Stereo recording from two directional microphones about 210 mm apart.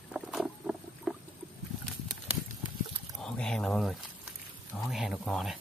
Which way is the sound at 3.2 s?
Centre (ahead or behind).